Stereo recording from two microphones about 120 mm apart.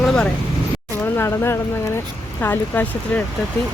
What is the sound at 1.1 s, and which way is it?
Speech, 20° left (ahead or behind).